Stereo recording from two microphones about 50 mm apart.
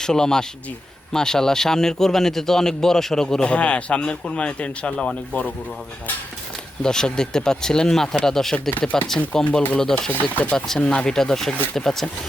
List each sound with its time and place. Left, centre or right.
0.0 s a man's voice: centre
3.4 s speech: left
6.8 s a man's voice: centre
9.4 s speech: left
10.1 s a man's voice: left; by 11.9 s centre